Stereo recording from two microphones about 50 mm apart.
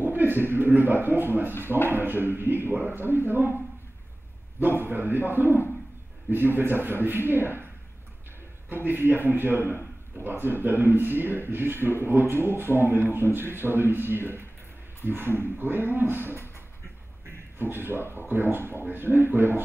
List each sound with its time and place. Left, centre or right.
0.0 s a man's voice: right
4.6 s a man's voice: right
8.6 s a man's voice: right
17.6 s a man's voice: right